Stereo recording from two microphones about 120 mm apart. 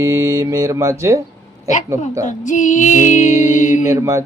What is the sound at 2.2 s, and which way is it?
Music, 90° left.